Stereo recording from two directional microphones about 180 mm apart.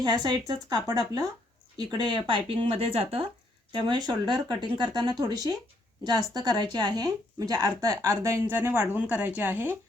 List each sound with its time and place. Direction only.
0.0 s speech: 25° right (ahead or behind)
3.7 s speech: 20° right (ahead or behind)